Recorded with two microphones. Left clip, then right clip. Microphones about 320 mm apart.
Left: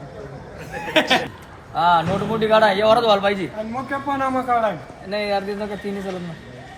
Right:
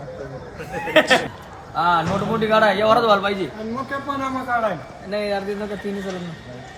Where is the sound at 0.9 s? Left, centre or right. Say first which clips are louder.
Right 2 dB; centre.